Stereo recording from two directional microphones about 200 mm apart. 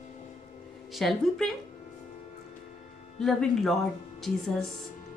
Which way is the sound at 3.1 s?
Centre (ahead or behind).